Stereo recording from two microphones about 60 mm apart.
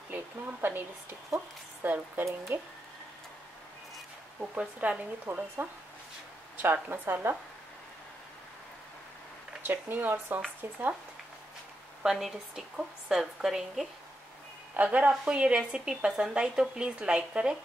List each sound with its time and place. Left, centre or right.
0.1 s a woman's voice: right
4.4 s speech: right
6.5 s a woman's voice: right
9.6 s a woman's voice: right
12.0 s a woman's voice: centre
14.8 s a woman's voice: right
16.1 s speech: centre
16.3 s a woman's voice: centre